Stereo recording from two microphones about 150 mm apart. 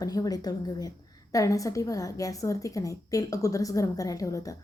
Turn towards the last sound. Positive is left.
turn(degrees=20)  # may be behind; listen again after turning